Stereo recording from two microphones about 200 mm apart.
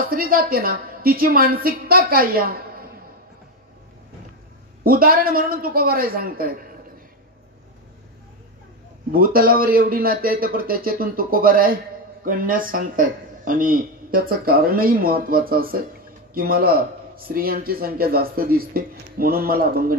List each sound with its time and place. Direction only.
0.1 s speech: 45° right (ahead or behind)
4.8 s speech: 45° right (ahead or behind)
9.1 s speech: 45° right (ahead or behind)